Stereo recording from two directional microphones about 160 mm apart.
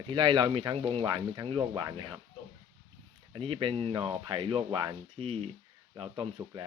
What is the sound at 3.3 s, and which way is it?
Speech, 30° right (ahead or behind).